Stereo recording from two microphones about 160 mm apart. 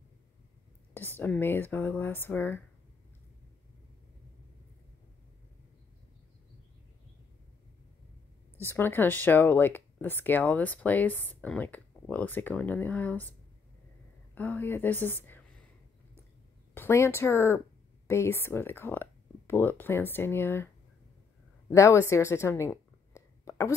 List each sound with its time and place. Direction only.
0.9 s speech: 10° left (ahead or behind)
8.5 s speech: 15° left (ahead or behind)
14.3 s a woman's voice: 10° left (ahead or behind)
16.7 s speech: 15° left (ahead or behind)
23.1 s a sound: 20° left (ahead or behind)